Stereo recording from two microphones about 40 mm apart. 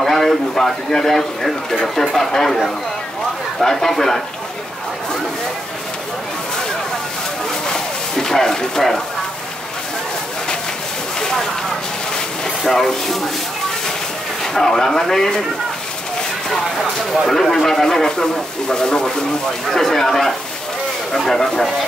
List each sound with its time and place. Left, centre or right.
0.0 s speech: centre
7.7 s a sound: centre
11.1 s a sound: centre
12.6 s speech: centre
14.4 s speech: centre
16.4 s speech: centre
18.0 s speech: centre
19.6 s speech: centre